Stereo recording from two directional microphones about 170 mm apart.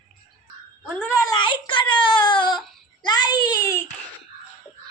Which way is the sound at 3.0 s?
25° left (ahead or behind).